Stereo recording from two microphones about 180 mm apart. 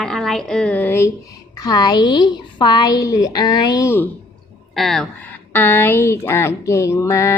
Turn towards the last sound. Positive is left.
turn(degrees=15)  # may be behind; listen again after turning